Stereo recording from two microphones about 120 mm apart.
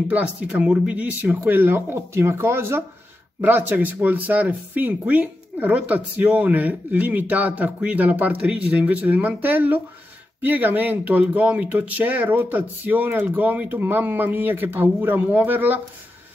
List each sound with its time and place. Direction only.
0.1 s speech: 15° right (ahead or behind)